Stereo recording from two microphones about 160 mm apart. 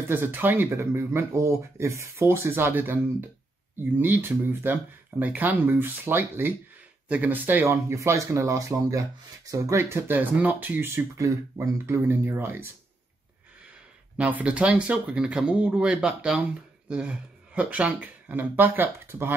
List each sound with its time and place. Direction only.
0.1 s speech: 10° right (ahead or behind)
14.1 s speech: 5° right (ahead or behind)